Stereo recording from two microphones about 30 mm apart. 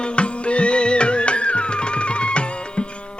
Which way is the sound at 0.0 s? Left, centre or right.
Left.